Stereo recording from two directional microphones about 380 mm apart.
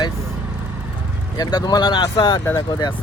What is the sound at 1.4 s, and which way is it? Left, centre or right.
Speech, centre.